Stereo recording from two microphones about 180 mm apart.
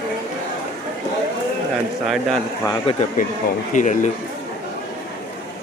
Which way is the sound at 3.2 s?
50° left (ahead or behind).